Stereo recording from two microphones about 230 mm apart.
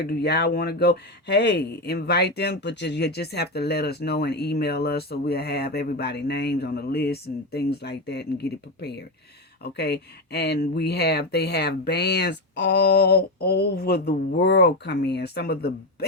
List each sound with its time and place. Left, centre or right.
0.0 s speech: left